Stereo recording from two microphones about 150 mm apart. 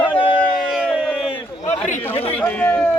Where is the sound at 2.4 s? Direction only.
10° left (ahead or behind).